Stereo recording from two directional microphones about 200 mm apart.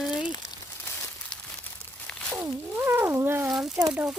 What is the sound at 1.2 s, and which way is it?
Crumpling, 5° left (ahead or behind).